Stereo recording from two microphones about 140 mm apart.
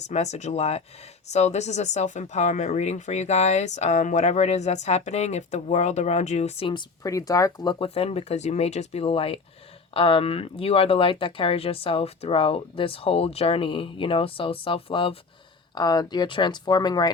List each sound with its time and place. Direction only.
0.0 s speech: 55° left (ahead or behind)
6.7 s speech: 30° left (ahead or behind)
7.9 s speech: 45° left (ahead or behind); by 17.1 s 30° left (ahead or behind)